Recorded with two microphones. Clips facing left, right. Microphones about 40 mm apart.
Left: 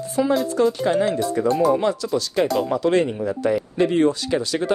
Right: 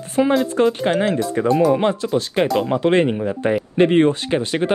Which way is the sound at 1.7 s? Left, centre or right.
Right.